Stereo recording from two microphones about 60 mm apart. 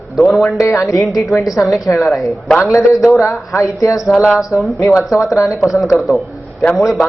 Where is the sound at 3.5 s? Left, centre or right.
Left.